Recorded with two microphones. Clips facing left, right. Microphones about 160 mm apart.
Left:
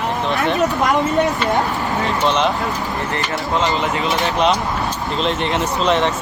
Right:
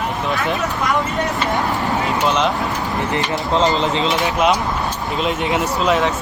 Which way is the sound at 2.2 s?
Centre (ahead or behind).